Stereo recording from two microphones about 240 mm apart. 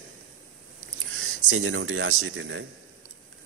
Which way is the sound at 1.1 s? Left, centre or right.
Right.